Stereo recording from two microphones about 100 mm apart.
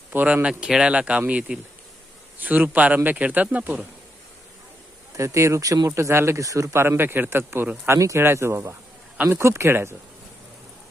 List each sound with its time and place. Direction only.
0.1 s a man's voice: 20° right (ahead or behind)
5.1 s speech: 30° right (ahead or behind)